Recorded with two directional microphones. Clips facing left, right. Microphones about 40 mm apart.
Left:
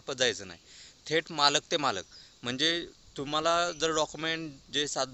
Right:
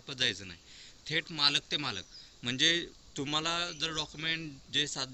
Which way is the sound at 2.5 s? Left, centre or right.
Right.